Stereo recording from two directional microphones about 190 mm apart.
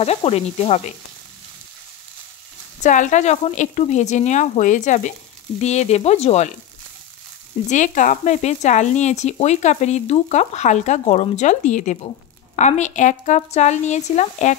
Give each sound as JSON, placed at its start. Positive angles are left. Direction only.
{"t": 0.0, "sound": "speech", "side_deg": 35}
{"t": 2.8, "sound": "speech", "side_deg": 40}
{"t": 7.7, "sound": "speech", "side_deg": 40}